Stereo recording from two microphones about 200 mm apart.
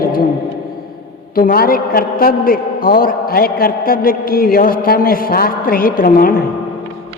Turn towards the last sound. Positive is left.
turn(degrees=45)  # may be behind; listen again after turning